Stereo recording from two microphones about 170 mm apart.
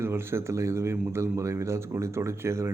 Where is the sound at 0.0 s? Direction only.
15° right (ahead or behind).